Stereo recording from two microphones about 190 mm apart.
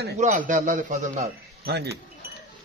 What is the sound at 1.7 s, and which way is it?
Speech, 60° right (ahead or behind).